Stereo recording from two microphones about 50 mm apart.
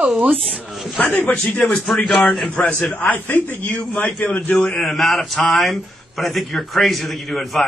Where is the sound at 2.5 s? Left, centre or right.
Left.